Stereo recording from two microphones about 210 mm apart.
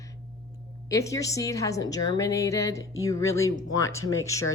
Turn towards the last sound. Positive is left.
turn(degrees=75)  # may be behind; listen again after turning